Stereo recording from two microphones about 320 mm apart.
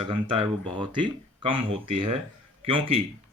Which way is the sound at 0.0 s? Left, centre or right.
Centre.